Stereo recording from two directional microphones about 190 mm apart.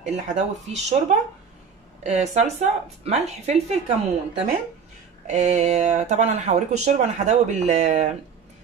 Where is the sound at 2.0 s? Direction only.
35° right (ahead or behind).